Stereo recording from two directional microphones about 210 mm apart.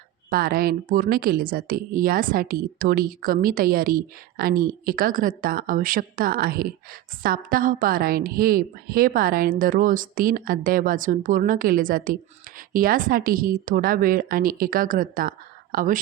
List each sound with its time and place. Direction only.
0.3 s a woman's voice: 45° right (ahead or behind)